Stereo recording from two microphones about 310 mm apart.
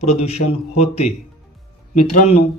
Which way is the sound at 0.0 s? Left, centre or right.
Left.